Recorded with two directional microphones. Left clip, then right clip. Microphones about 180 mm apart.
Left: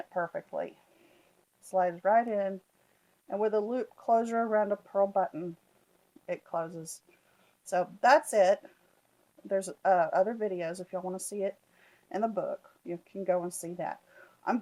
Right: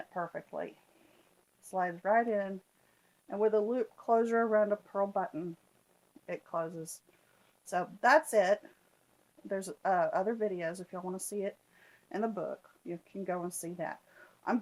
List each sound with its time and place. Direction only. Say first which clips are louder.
0.1 s speech: left 6 dB; 40° left (ahead or behind)
1.7 s speech: left 4 dB; 40° left (ahead or behind)